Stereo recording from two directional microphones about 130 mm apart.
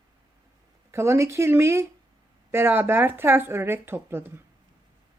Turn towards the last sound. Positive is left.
turn(degrees=-15)  # may be behind; listen again after turning